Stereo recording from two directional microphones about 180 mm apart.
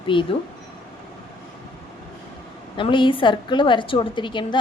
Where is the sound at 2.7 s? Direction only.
25° left (ahead or behind).